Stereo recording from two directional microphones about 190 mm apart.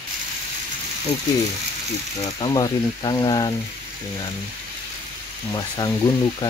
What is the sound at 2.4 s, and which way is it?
Speech, 25° left (ahead or behind).